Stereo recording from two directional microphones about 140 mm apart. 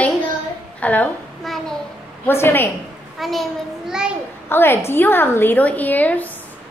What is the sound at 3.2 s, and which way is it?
Speech, centre (ahead or behind).